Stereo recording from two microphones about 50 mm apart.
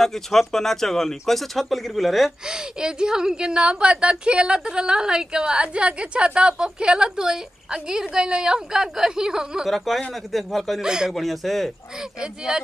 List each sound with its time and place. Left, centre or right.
0.0 s speech: centre
2.4 s a woman's voice: centre
9.7 s speech: centre
10.8 s a woman's voice: centre
11.1 s speech: centre
12.2 s a woman's voice: centre